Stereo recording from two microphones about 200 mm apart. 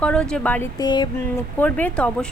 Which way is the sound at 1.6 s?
10° left (ahead or behind).